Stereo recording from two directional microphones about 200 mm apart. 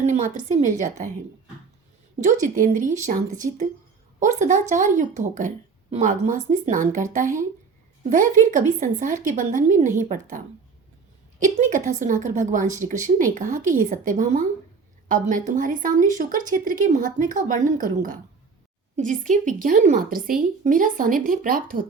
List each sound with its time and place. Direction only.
0.0 s speech: 35° right (ahead or behind)
2.2 s speech: 40° right (ahead or behind)